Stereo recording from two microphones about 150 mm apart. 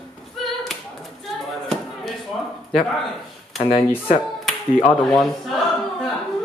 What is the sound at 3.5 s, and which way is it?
Speech, 40° left (ahead or behind).